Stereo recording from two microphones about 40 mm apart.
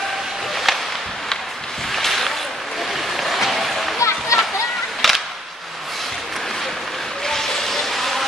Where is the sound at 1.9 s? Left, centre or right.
Centre.